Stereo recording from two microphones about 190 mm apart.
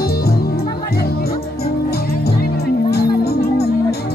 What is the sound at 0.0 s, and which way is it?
Music, 55° left (ahead or behind).